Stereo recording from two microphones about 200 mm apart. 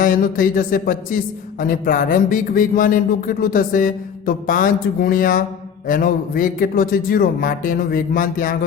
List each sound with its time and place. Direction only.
0.0 s speech: 45° left (ahead or behind)